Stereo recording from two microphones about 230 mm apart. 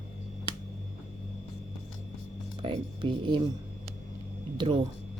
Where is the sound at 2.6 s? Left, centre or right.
Right.